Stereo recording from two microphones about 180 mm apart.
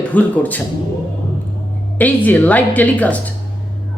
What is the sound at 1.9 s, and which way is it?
A woman's voice, 10° left (ahead or behind).